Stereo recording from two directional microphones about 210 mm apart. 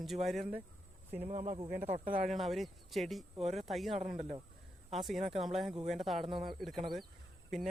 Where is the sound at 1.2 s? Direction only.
35° right (ahead or behind).